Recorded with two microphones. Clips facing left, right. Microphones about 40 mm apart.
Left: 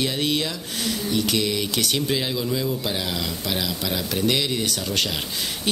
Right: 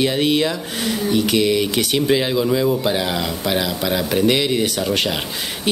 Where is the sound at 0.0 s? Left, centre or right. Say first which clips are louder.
Right 7 dB; centre.